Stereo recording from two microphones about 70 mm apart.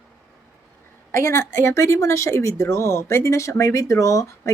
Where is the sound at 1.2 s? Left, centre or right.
Left.